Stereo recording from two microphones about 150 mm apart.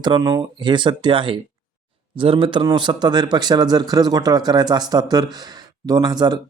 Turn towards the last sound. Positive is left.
turn(degrees=-25)  # may be behind; listen again after turning